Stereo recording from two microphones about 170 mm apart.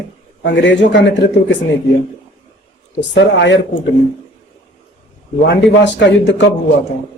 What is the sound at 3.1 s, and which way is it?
Speech, 90° left.